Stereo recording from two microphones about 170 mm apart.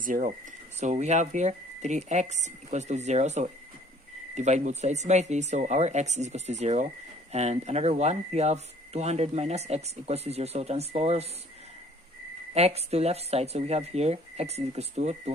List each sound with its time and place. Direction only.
0.0 s speech: 50° right (ahead or behind)
12.5 s speech: 40° right (ahead or behind)